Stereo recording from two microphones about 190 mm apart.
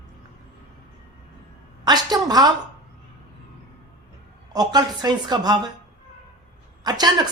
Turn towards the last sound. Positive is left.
turn(degrees=-20)  # may be behind; listen again after turning